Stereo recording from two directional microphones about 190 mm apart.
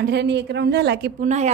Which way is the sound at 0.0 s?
60° right (ahead or behind).